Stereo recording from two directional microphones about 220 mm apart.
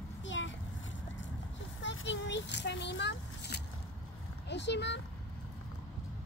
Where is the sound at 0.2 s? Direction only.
60° left (ahead or behind).